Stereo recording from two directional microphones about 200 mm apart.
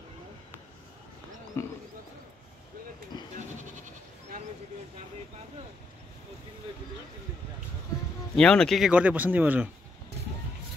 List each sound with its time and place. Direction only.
1.6 s speech: 15° left (ahead or behind)
3.1 s bleat: 20° left (ahead or behind)
8.4 s speech: 5° left (ahead or behind)